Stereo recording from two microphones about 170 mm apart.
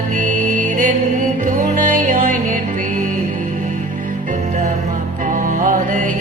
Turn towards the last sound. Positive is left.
turn(degrees=-50)  # may be behind; listen again after turning